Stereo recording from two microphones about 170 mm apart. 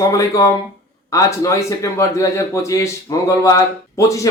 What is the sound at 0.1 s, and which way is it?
A man's voice, 20° left (ahead or behind).